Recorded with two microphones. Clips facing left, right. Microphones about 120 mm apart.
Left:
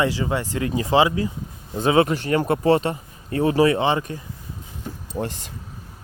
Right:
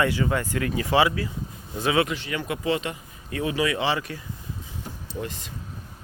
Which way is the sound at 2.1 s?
45° left (ahead or behind).